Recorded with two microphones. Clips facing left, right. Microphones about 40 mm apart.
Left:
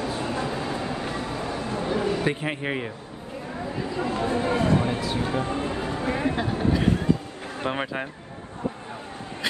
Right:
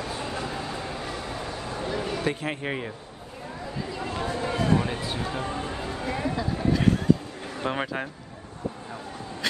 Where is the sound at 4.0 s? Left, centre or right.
Left.